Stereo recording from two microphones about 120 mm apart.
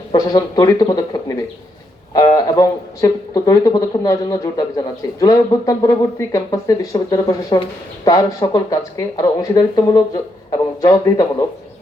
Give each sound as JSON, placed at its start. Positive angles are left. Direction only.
{"t": 0.1, "sound": "speech", "side_deg": 35}